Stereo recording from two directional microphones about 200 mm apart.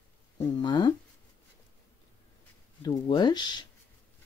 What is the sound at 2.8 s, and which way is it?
Speech, 20° left (ahead or behind).